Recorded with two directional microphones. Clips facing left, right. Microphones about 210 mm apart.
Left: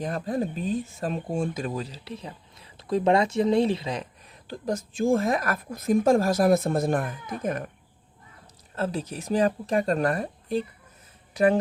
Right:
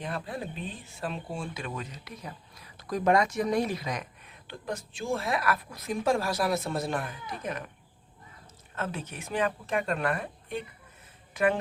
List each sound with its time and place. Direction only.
0.0 s speech: 40° left (ahead or behind)
8.7 s speech: 35° left (ahead or behind)